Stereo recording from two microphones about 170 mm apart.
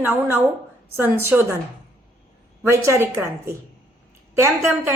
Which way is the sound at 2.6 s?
15° right (ahead or behind).